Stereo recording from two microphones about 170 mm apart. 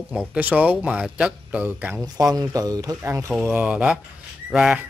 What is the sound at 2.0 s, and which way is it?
A man's voice, 20° right (ahead or behind).